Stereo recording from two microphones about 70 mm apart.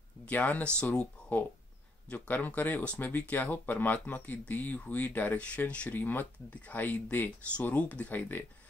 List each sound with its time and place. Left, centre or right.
0.3 s speech: left